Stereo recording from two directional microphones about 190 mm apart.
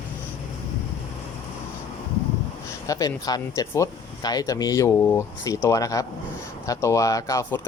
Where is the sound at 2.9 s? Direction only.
20° left (ahead or behind).